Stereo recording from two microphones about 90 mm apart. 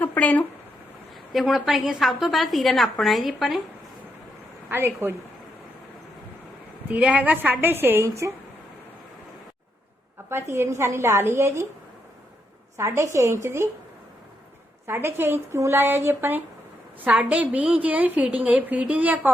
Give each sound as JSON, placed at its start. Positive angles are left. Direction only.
{"t": 0.0, "sound": "a sound", "side_deg": 20}
{"t": 1.3, "sound": "a woman's voice", "side_deg": 0}
{"t": 4.7, "sound": "a woman's voice", "side_deg": -25}
{"t": 7.0, "sound": "a woman's voice", "side_deg": -15}
{"t": 10.2, "sound": "a woman's voice", "side_deg": -30}
{"t": 12.7, "sound": "a woman's voice", "side_deg": -30}
{"t": 14.8, "sound": "a woman's voice", "side_deg": -25}
{"t": 17.0, "sound": "a woman's voice", "side_deg": -15}